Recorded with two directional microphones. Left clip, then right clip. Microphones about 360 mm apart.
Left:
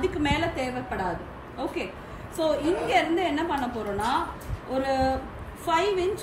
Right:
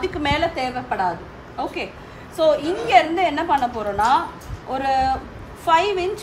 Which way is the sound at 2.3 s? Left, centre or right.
Centre.